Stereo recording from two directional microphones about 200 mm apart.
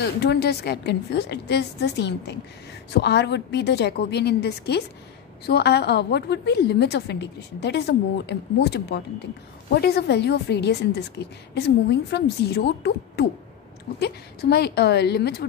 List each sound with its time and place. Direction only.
0.2 s a woman's voice: 55° left (ahead or behind)